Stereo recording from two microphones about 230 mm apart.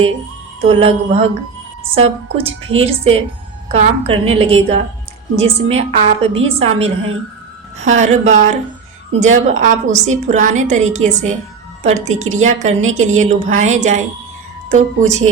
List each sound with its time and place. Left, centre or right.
0.6 s a woman's voice: right